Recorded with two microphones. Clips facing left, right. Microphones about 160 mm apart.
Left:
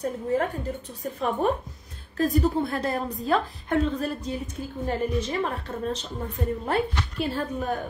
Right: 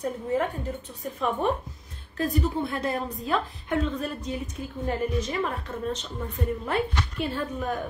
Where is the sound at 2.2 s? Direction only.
40° left (ahead or behind).